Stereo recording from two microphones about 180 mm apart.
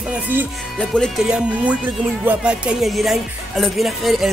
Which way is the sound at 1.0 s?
5° right (ahead or behind).